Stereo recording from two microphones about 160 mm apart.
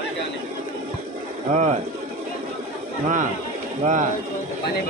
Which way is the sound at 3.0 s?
55° right (ahead or behind).